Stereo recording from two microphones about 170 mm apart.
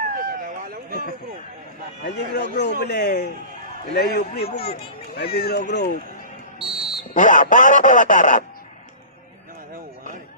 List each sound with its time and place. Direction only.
0.0 s a sound: 60° right (ahead or behind)
2.0 s a man's voice: 80° left
4.5 s speech: 35° left (ahead or behind)
5.1 s a man's voice: 70° left (ahead or behind)
6.6 s music: centre (ahead or behind)
7.1 s speech: 50° left (ahead or behind)
9.7 s a sound: 50° right (ahead or behind)